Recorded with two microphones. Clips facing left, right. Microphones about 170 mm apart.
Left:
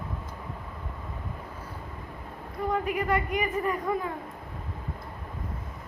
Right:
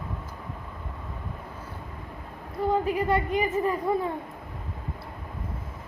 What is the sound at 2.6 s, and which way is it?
A woman's voice, 30° right (ahead or behind).